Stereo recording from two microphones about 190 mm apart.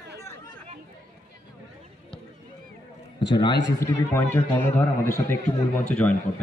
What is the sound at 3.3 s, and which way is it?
A man's voice, 25° left (ahead or behind).